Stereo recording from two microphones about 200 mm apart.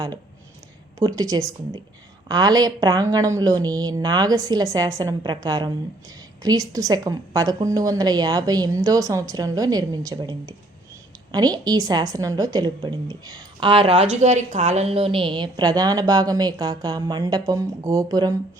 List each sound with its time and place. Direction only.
0.9 s a woman's voice: 20° right (ahead or behind)